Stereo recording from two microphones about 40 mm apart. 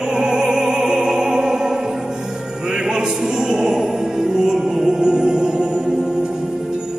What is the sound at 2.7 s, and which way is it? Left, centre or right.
Music, centre.